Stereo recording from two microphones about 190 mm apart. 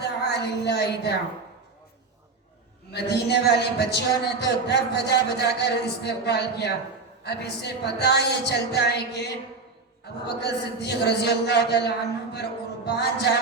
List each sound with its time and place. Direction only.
0.0 s a sound: 60° left (ahead or behind)
2.9 s a man's voice: 60° left (ahead or behind)
10.2 s a man's voice: 60° left (ahead or behind)
12.3 s music: 60° left (ahead or behind)